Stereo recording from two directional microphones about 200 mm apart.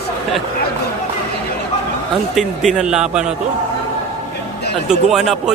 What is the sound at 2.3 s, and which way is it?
Speech, 5° right (ahead or behind).